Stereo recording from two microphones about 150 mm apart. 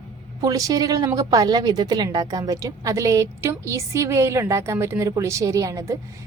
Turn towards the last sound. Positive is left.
turn(degrees=-20)  # may be behind; listen again after turning